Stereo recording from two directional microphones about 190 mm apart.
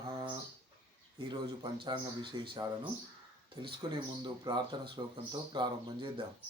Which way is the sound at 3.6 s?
25° right (ahead or behind).